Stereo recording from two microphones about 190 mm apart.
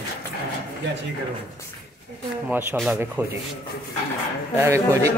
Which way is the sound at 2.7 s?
Centre (ahead or behind).